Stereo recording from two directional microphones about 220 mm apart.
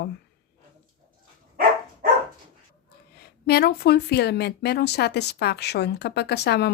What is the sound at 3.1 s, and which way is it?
Speech, 45° left (ahead or behind).